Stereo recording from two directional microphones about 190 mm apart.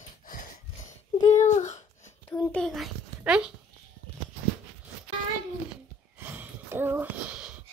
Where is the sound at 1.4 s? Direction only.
40° left (ahead or behind).